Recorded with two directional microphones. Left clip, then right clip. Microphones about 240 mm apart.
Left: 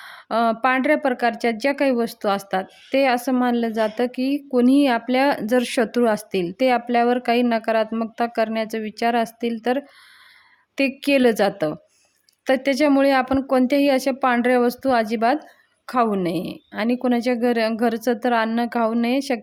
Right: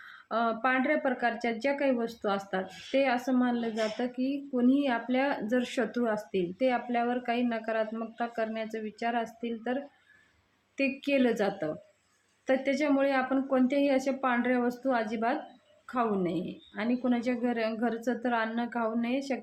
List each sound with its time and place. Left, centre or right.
0.0 s speech: left